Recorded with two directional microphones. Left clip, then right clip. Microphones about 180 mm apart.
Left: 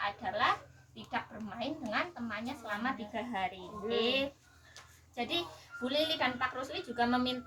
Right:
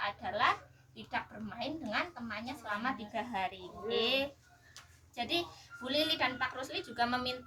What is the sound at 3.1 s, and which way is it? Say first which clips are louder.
Speech: even; 35° right (ahead or behind).